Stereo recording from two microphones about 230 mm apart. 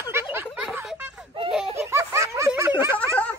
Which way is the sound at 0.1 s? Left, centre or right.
Centre.